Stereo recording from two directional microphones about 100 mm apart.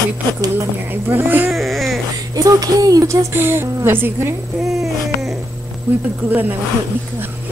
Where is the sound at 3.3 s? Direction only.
25° right (ahead or behind).